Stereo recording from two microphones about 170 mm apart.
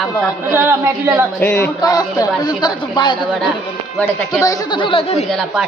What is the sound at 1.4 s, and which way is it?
Speech, 10° left (ahead or behind).